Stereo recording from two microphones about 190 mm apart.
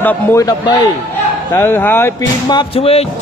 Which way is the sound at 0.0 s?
15° left (ahead or behind).